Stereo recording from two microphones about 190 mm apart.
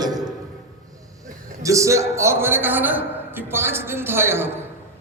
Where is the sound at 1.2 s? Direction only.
15° right (ahead or behind).